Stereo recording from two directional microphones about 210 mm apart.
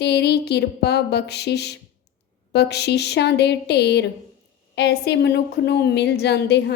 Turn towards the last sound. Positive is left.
turn(degrees=55)  # may be behind; listen again after turning